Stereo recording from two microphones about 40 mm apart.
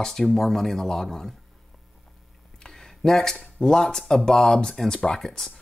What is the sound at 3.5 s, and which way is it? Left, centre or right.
Speech, centre.